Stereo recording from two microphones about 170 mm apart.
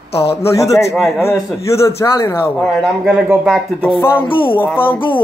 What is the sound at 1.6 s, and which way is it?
Speech, 15° left (ahead or behind).